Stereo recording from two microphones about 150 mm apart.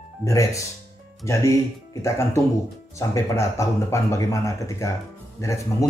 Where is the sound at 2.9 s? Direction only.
20° left (ahead or behind).